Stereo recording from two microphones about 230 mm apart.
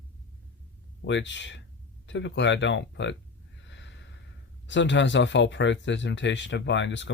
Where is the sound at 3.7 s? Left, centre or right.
Left.